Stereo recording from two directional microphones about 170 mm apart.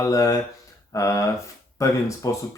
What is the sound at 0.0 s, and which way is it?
Speech, 20° left (ahead or behind).